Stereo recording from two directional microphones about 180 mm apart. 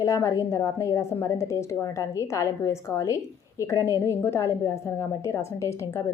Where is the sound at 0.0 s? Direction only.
15° left (ahead or behind).